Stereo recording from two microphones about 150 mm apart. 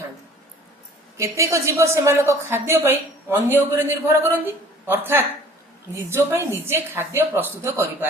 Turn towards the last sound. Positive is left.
turn(degrees=-15)  # may be behind; listen again after turning